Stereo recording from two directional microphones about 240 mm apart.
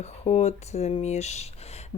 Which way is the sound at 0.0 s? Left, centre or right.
Left.